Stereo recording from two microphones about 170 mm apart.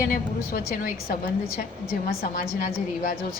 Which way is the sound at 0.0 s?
55° left (ahead or behind).